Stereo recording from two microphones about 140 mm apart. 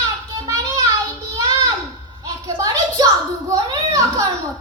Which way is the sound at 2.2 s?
25° right (ahead or behind).